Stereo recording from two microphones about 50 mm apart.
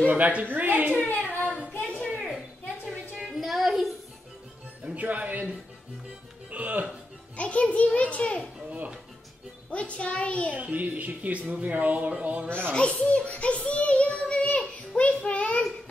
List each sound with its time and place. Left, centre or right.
0.1 s speech: right
1.0 s a sound: left
3.2 s a sound: centre
4.8 s speech: right
6.5 s speech: right
7.3 s a child's voice: left
8.6 s music: right
9.7 s a child's voice: left
10.5 s speech: right
12.1 s music: right
12.4 s a child's voice: right
12.7 s a child's voice: left
15.0 s child singing: left